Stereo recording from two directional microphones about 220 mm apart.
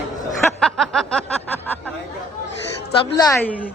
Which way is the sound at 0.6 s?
Centre (ahead or behind).